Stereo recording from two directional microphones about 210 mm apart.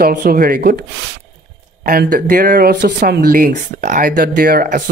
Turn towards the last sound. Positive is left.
turn(degrees=-45)  # may be behind; listen again after turning